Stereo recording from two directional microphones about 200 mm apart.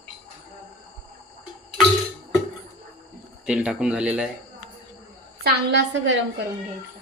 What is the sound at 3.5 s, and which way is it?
Speech, 5° right (ahead or behind).